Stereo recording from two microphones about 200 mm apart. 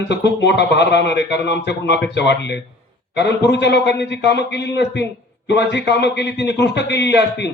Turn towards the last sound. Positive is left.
turn(degrees=60)  # may be behind; listen again after turning